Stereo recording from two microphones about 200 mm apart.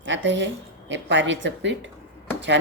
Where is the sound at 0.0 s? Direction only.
65° right (ahead or behind).